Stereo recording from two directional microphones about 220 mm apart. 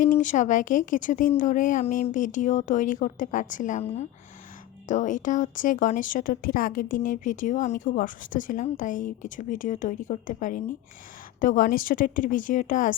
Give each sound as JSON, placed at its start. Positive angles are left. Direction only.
{"t": 0.0, "sound": "speech", "side_deg": 35}